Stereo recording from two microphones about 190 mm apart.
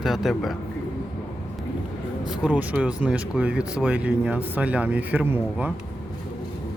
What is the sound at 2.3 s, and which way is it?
Speech, 5° right (ahead or behind).